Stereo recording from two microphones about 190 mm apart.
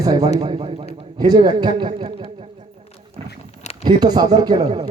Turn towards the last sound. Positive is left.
turn(degrees=-25)  # may be behind; listen again after turning